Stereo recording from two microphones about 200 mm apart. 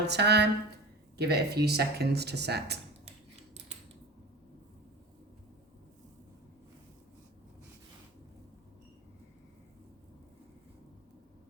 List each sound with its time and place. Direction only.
0.0 s a woman's voice: 55° right (ahead or behind)